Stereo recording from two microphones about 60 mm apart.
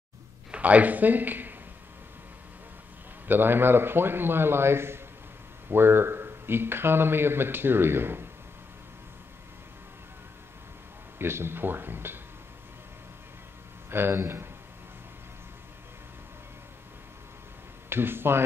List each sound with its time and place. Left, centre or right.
0.5 s speech: right
3.3 s speech: right
11.1 s speech: right
13.8 s speech: right
17.8 s speech: right